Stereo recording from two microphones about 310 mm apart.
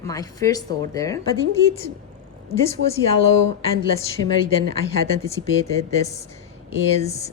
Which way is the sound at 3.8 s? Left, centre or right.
Centre.